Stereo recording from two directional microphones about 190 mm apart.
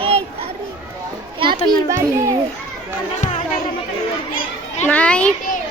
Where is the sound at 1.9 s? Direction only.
15° right (ahead or behind).